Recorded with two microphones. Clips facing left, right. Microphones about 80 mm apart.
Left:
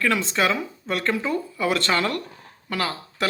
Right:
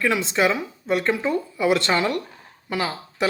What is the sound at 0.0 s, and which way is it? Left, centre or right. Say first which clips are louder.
Speech: right 1 dB; centre.